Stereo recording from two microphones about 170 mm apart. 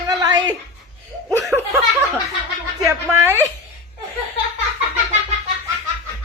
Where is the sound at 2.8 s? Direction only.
15° right (ahead or behind).